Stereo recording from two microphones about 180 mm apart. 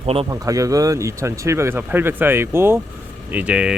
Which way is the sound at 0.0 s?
35° right (ahead or behind).